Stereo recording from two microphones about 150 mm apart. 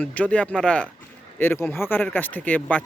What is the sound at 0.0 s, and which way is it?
Speech, 10° left (ahead or behind).